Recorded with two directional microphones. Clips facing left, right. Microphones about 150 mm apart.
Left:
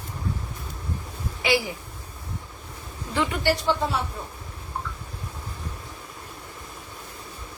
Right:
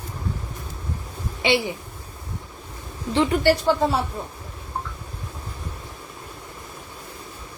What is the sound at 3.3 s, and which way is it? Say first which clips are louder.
Speech: right 5 dB; 45° right (ahead or behind).